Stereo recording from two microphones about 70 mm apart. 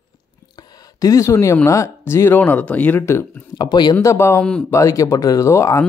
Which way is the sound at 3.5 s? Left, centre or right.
Left.